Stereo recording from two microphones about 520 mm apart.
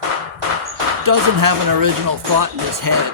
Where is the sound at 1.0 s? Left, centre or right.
Right.